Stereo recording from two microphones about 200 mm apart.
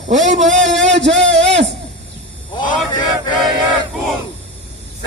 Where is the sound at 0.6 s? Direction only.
65° right (ahead or behind).